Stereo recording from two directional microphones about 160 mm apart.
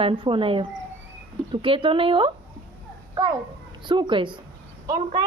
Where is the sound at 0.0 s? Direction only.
35° right (ahead or behind).